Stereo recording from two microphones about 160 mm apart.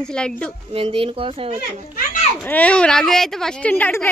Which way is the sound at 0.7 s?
35° right (ahead or behind).